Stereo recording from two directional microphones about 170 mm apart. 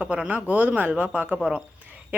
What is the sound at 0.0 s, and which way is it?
Speech, 5° right (ahead or behind).